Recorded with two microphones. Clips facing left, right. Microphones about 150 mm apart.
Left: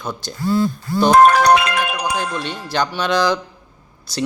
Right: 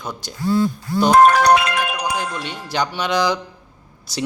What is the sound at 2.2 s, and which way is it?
Speech, 15° right (ahead or behind).